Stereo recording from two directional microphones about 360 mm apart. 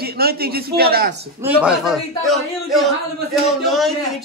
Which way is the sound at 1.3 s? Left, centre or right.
Centre.